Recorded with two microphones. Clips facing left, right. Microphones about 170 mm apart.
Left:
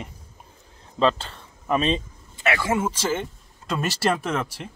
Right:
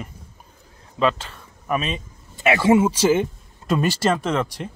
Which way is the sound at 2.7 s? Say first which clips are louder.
Right 8 dB; 10° right (ahead or behind).